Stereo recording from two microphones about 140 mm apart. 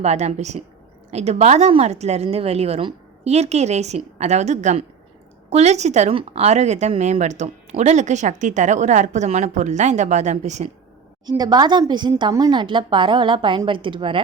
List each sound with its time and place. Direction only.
0.0 s a woman's voice: 50° right (ahead or behind)
11.3 s a woman's voice: 30° right (ahead or behind)